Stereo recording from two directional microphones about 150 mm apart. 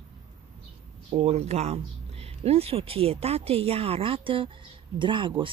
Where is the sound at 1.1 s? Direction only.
45° right (ahead or behind).